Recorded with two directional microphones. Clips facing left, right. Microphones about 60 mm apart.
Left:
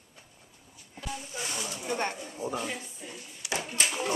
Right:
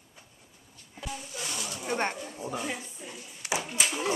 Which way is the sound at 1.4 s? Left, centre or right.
Left.